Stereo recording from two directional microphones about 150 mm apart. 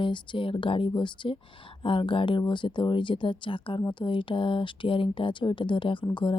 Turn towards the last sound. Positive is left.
turn(degrees=35)  # may be behind; listen again after turning